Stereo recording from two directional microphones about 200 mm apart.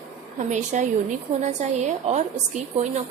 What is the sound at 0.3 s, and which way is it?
A woman's voice, 40° right (ahead or behind).